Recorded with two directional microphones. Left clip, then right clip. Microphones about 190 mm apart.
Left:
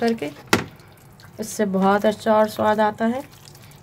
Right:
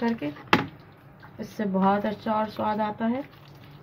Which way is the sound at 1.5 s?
50° left (ahead or behind).